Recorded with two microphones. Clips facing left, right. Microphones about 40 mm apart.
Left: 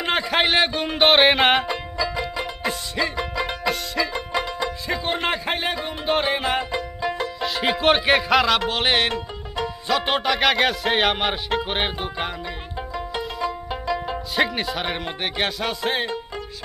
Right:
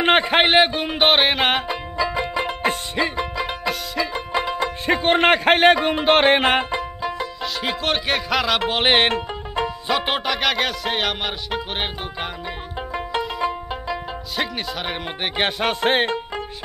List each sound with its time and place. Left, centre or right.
0.0 s a man's voice: right
0.6 s music: centre
2.0 s music: right
3.2 s music: centre
4.1 s music: centre
4.8 s speech: right
7.0 s music: centre
8.5 s music: centre
9.8 s music: centre
13.7 s music: centre
14.0 s music: centre
15.2 s music: right
15.6 s music: right